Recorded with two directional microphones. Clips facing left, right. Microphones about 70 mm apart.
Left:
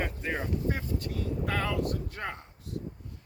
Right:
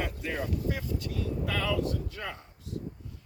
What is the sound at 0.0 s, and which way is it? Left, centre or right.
Vehicle, left.